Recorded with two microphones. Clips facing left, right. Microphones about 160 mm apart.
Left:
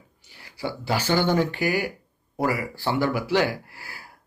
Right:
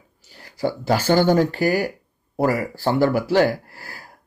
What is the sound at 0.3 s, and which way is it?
A man's voice, 45° right (ahead or behind).